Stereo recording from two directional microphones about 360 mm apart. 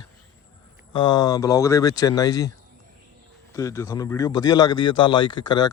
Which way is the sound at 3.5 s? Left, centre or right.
Centre.